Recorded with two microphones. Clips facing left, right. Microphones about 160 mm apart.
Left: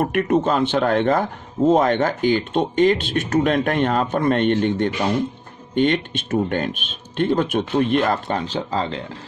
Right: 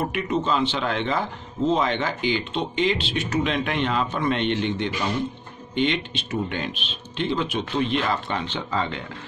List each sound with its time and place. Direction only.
0.0 s speech: 55° left (ahead or behind); by 9.0 s 35° left (ahead or behind)